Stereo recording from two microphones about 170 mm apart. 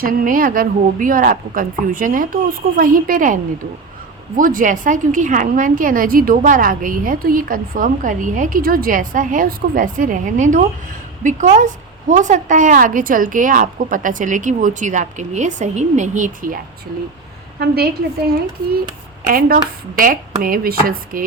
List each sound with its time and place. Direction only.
0.0 s a woman's voice: 55° right (ahead or behind)
4.4 s a woman's voice: 50° right (ahead or behind)
19.2 s a woman's voice: 60° right (ahead or behind)